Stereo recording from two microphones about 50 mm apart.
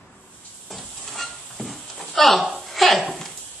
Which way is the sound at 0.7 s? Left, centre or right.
Centre.